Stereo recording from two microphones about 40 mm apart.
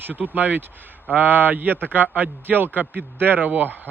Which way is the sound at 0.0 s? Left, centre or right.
Right.